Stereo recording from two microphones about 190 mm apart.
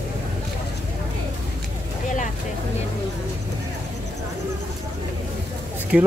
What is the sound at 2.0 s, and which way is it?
Vehicle, 40° left (ahead or behind).